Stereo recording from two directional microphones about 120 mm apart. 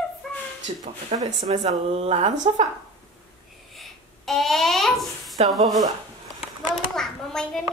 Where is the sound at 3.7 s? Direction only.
Centre (ahead or behind).